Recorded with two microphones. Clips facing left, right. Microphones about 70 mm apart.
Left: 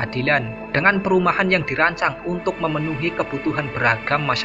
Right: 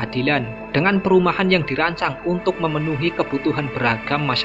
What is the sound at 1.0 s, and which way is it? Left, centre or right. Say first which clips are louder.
Speech: right 2 dB; centre.